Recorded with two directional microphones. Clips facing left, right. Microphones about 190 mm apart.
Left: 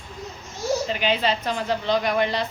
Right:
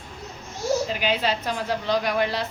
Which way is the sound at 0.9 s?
5° right (ahead or behind).